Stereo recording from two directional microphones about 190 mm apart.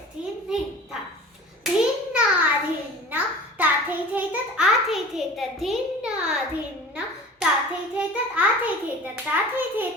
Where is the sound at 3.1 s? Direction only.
10° right (ahead or behind).